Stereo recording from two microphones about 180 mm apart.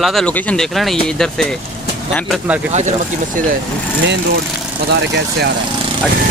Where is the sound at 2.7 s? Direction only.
40° right (ahead or behind).